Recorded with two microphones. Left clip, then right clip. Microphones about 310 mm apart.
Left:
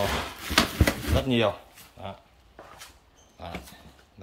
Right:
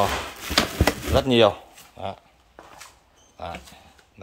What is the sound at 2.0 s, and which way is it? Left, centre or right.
Speech, centre.